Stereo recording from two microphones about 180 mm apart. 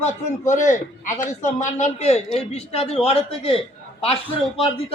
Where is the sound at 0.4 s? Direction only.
40° left (ahead or behind).